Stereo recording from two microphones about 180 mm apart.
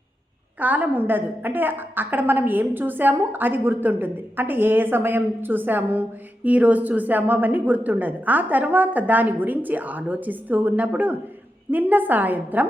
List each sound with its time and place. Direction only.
0.6 s a woman's voice: 10° right (ahead or behind)